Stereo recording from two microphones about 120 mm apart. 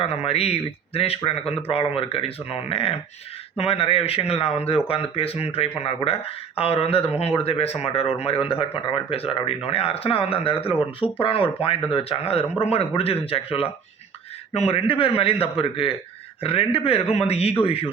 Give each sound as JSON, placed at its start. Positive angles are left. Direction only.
{"t": 0.0, "sound": "speech", "side_deg": 55}